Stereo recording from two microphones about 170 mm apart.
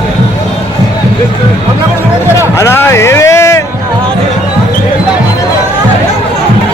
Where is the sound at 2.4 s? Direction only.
15° left (ahead or behind).